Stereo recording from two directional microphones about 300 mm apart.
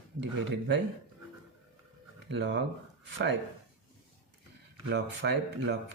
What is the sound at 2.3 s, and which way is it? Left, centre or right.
Speech, right.